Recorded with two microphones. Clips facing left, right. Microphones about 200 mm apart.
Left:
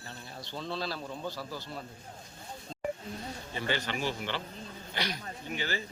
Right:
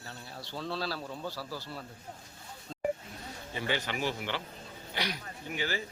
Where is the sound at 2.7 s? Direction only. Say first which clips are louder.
Right 3 dB; 25° left (ahead or behind).